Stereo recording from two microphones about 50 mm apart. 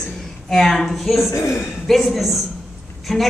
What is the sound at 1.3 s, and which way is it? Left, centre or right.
Speech, left.